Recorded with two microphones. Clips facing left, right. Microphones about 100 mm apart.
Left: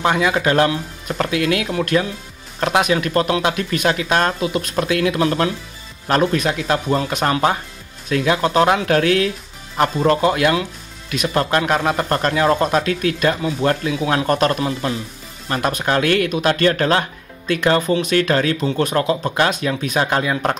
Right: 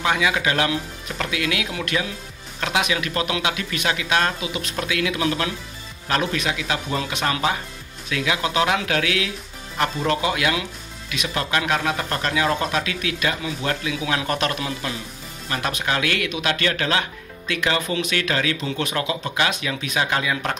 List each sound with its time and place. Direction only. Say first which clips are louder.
0.0 s speech: left 4 dB; 50° left (ahead or behind)